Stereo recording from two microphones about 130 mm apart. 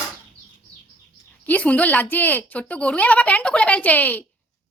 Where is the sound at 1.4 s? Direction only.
10° left (ahead or behind).